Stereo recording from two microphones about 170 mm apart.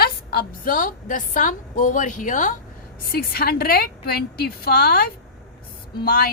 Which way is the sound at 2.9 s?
65° left (ahead or behind).